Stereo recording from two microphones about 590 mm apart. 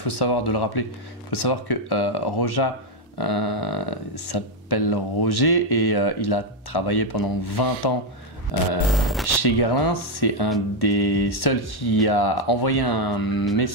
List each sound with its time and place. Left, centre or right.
0.0 s speech: left
8.9 s speech: centre
9.4 s speech: left